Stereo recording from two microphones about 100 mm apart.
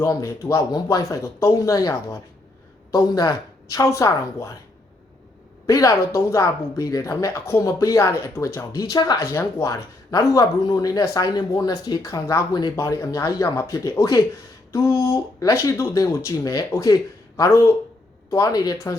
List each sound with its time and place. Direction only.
0.0 s speech: 30° left (ahead or behind)
0.7 s speech: 40° left (ahead or behind)
5.6 s speech: 35° left (ahead or behind)
8.8 s speech: 40° left (ahead or behind)
9.1 s speech: 25° left (ahead or behind)